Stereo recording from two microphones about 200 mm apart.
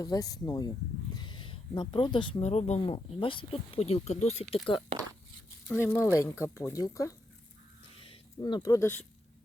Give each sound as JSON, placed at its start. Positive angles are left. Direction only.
{"t": 0.0, "sound": "speech", "side_deg": 20}
{"t": 5.6, "sound": "speech", "side_deg": 10}